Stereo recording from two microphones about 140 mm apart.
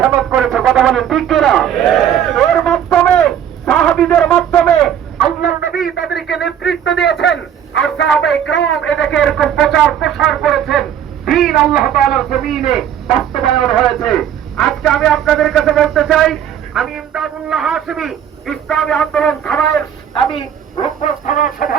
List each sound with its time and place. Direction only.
0.0 s a sound: 5° right (ahead or behind)
8.9 s speech: centre (ahead or behind)
21.0 s chicken: 75° left (ahead or behind)